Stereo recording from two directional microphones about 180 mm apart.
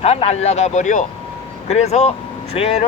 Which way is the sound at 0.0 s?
35° left (ahead or behind).